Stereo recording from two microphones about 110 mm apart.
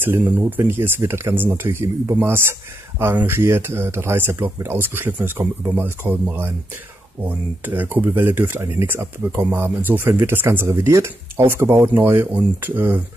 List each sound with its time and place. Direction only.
0.0 s speech: 20° right (ahead or behind)